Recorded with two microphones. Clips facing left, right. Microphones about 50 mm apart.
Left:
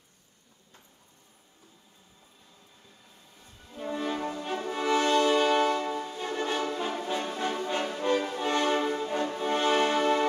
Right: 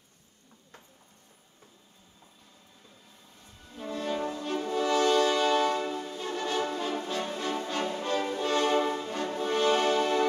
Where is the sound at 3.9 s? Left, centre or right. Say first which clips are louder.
Left 1 dB; left.